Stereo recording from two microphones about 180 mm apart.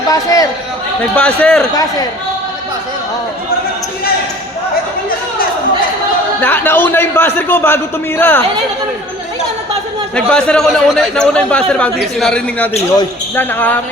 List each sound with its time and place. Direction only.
0.1 s speech: 20° left (ahead or behind)
1.1 s a man's voice: 5° left (ahead or behind)
1.7 s a man's voice: 20° left (ahead or behind)
6.4 s a man's voice: 10° left (ahead or behind)
10.2 s a man's voice: 5° left (ahead or behind)